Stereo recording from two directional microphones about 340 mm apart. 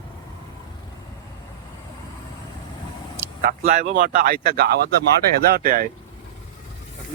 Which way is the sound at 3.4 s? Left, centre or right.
Right.